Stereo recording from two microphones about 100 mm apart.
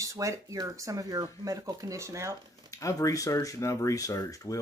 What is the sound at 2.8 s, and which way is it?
Speech, 35° left (ahead or behind).